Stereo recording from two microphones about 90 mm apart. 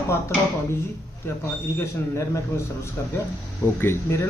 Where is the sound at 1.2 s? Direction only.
25° left (ahead or behind).